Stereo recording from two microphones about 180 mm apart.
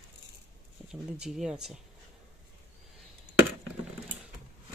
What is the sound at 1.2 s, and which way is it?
Speech, 5° right (ahead or behind).